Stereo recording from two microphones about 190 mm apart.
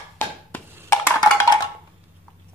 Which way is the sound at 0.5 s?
10° left (ahead or behind).